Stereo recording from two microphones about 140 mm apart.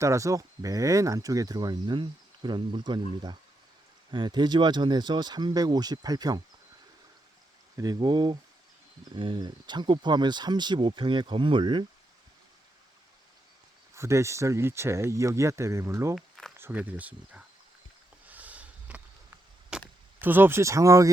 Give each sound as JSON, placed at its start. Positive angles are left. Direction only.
{"t": 0.0, "sound": "speech", "side_deg": -20}
{"t": 7.8, "sound": "speech", "side_deg": -30}
{"t": 13.9, "sound": "speech", "side_deg": -20}
{"t": 18.3, "sound": "a sound", "side_deg": -10}
{"t": 20.2, "sound": "speech", "side_deg": -15}